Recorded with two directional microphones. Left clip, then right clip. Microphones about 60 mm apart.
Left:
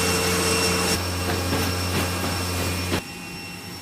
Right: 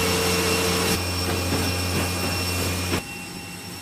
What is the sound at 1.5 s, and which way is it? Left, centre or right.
Vehicle, left.